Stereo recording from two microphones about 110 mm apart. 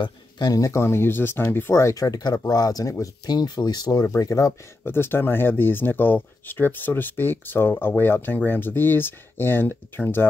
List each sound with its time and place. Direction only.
0.0 s speech: 35° left (ahead or behind); by 10.2 s 20° left (ahead or behind)